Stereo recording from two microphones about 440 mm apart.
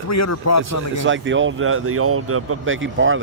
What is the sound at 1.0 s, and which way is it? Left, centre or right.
Speech, right.